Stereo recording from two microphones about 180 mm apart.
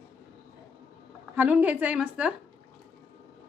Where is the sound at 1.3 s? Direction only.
10° right (ahead or behind).